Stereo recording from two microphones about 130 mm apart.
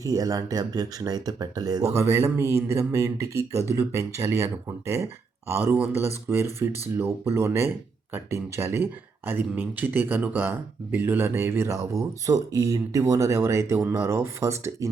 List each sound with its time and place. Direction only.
0.0 s speech: 25° right (ahead or behind)
5.5 s speech: 20° right (ahead or behind)